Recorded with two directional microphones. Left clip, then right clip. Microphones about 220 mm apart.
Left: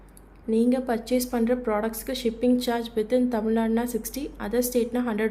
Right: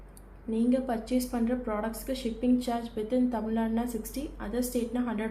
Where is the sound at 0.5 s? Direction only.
45° left (ahead or behind).